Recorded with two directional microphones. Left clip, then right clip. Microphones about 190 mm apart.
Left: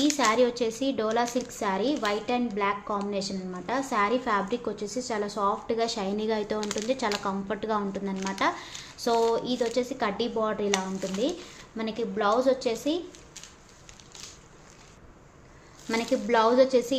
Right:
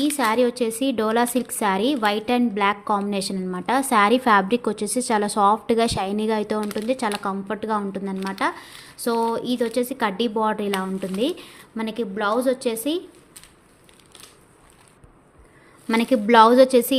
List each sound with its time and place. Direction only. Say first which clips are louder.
0.2 s a woman's voice: right 5 dB; 35° right (ahead or behind)
15.9 s a woman's voice: right 7 dB; 45° right (ahead or behind)